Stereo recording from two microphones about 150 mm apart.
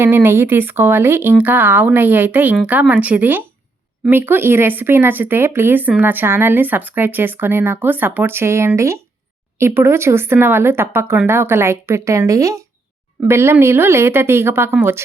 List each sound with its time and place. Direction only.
0.0 s speech: 15° right (ahead or behind)